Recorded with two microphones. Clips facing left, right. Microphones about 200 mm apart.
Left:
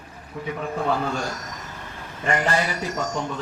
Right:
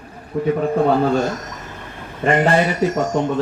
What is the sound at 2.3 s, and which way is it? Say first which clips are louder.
Speech: right 8 dB; 55° right (ahead or behind).